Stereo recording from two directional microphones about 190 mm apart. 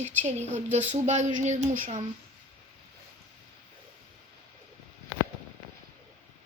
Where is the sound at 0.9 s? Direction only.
40° right (ahead or behind).